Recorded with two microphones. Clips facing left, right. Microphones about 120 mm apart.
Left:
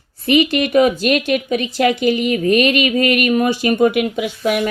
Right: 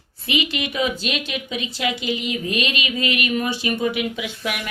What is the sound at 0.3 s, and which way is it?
A woman's voice, 50° left (ahead or behind).